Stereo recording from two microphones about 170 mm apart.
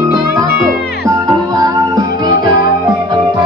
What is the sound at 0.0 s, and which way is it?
Music, 20° right (ahead or behind).